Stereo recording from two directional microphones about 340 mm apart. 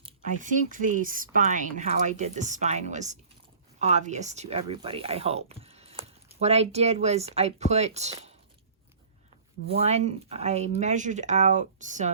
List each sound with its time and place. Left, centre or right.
0.0 s speech: right
9.6 s speech: centre